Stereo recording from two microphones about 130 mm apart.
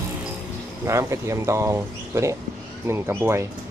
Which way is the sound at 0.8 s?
20° right (ahead or behind).